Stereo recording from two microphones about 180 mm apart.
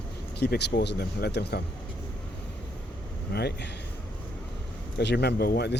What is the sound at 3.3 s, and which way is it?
Speech, 65° left (ahead or behind).